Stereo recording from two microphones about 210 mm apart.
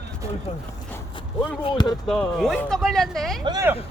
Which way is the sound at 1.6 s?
20° left (ahead or behind).